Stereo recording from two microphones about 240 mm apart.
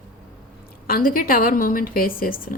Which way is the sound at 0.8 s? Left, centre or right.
Left.